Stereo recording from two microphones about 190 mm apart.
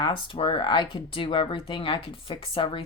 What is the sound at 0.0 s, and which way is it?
A woman's voice, 25° left (ahead or behind).